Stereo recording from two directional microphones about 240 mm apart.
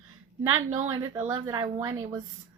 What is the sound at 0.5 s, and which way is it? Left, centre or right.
A woman's voice, right.